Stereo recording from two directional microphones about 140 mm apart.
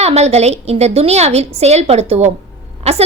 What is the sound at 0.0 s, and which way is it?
A woman's voice, 50° right (ahead or behind).